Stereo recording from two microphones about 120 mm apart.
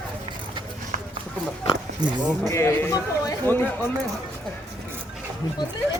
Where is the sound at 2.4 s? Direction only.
20° left (ahead or behind).